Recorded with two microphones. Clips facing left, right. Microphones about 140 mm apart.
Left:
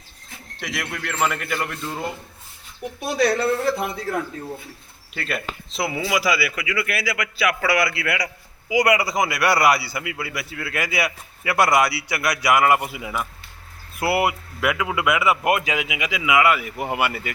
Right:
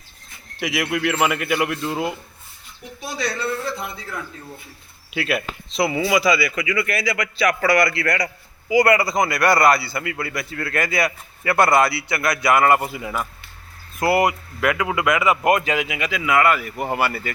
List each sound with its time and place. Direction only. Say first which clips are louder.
0.6 s speech: right 8 dB; 5° right (ahead or behind)
3.0 s speech: left 6 dB; 65° left (ahead or behind)
5.1 s a man's voice: right 5 dB; 5° right (ahead or behind); by 17.3 s 15° left (ahead or behind)